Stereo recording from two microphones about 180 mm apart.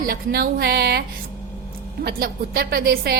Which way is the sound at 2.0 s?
60° right (ahead or behind).